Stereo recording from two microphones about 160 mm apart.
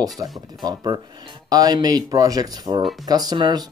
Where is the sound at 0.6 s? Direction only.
25° right (ahead or behind).